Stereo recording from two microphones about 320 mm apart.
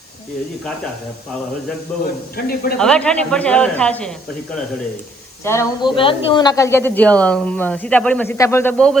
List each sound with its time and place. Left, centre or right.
2.3 s speech: left
2.7 s a man's voice: centre
5.5 s a man's voice: centre